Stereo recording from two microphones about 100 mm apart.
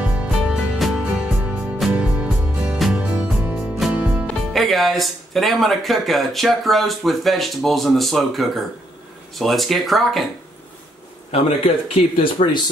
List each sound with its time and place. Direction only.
0.0 s music: 10° right (ahead or behind)
4.3 s speech: 5° left (ahead or behind)
11.3 s speech: 85° left